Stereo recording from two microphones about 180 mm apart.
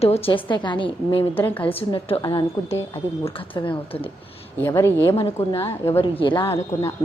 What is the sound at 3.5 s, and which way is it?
Speech, 30° left (ahead or behind).